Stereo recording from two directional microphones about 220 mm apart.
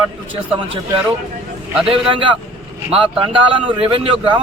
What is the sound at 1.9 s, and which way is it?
A man's voice, 25° right (ahead or behind).